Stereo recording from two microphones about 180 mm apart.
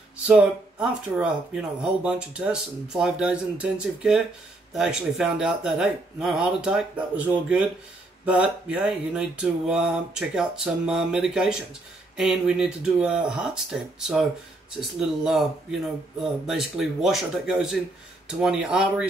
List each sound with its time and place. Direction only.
0.3 s speech: 5° right (ahead or behind)